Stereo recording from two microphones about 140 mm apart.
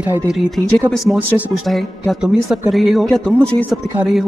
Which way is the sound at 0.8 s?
Centre (ahead or behind).